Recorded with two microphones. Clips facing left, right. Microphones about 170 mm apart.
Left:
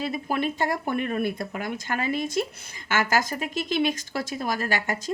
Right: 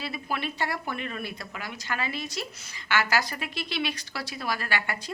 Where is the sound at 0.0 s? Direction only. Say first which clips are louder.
Left 6 dB; 45° left (ahead or behind).